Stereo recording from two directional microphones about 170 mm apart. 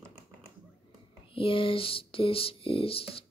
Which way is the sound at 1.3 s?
30° left (ahead or behind).